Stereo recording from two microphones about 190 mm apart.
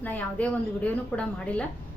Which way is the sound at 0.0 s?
10° left (ahead or behind).